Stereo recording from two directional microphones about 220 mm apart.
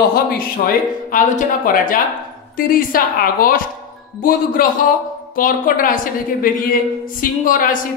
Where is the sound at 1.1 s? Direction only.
40° left (ahead or behind).